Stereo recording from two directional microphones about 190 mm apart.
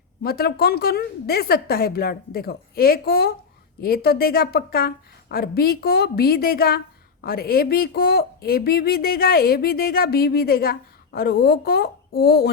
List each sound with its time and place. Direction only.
0.2 s a woman's voice: 55° left (ahead or behind)